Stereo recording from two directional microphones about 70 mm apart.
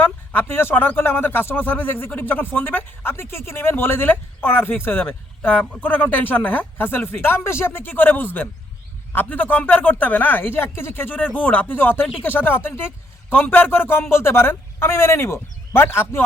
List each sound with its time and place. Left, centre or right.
0.0 s speech: left